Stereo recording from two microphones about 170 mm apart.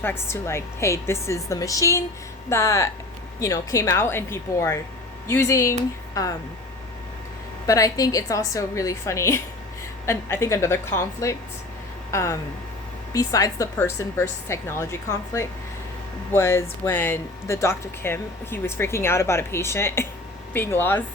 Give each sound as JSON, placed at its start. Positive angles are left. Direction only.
{"t": 0.0, "sound": "speech", "side_deg": 15}
{"t": 7.7, "sound": "a woman's voice", "side_deg": 20}
{"t": 16.3, "sound": "speech", "side_deg": 15}